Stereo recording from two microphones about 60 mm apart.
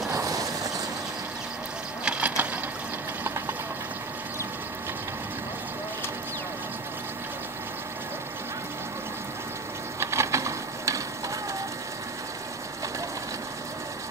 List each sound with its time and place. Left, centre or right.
0.1 s vehicle: right
2.0 s mechanisms: right
3.3 s vehicle: right
9.9 s a sound: right